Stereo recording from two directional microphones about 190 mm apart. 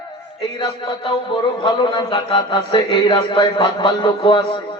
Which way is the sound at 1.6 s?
25° left (ahead or behind).